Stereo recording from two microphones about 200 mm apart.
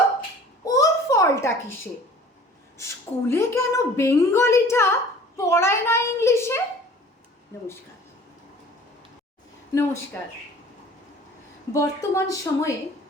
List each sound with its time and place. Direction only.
0.6 s a sound: 15° left (ahead or behind)
2.7 s a woman's voice: 15° left (ahead or behind)
10.1 s a woman's voice: 10° left (ahead or behind)
11.7 s a woman's voice: 15° left (ahead or behind)